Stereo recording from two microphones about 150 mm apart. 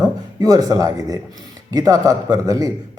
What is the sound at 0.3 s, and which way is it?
A man's voice, 25° right (ahead or behind).